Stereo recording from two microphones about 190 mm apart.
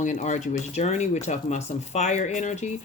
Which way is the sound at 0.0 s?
40° left (ahead or behind).